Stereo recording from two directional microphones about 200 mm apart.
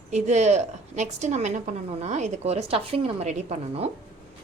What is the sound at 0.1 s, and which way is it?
A woman's voice, 35° right (ahead or behind).